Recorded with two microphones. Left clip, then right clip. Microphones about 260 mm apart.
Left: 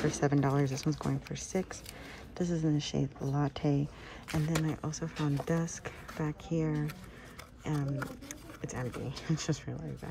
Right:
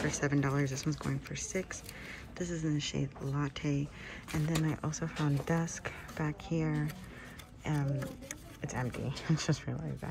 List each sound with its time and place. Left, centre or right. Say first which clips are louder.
0.1 s speech: left 3 dB; centre